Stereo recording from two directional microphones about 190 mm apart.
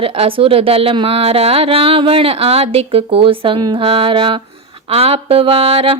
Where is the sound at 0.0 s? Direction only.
30° right (ahead or behind).